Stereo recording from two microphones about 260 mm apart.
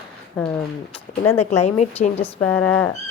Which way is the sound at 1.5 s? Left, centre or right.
Left.